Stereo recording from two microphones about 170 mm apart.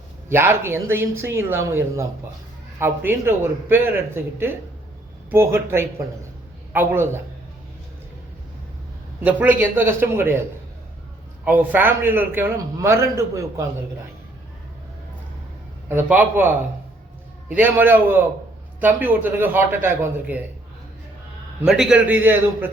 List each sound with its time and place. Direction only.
0.3 s a man's voice: 15° right (ahead or behind)
9.2 s a man's voice: 10° right (ahead or behind)
11.4 s a man's voice: 10° right (ahead or behind)
15.9 s a man's voice: 10° right (ahead or behind)
17.5 s a man's voice: 10° right (ahead or behind)
21.6 s a man's voice: 5° right (ahead or behind)